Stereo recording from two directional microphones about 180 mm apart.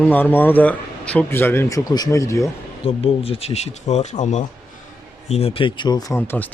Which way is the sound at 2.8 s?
30° left (ahead or behind).